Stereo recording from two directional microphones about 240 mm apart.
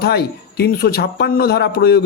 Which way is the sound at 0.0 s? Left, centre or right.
Left.